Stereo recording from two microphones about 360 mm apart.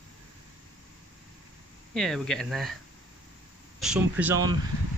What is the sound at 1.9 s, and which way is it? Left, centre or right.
Speech, centre.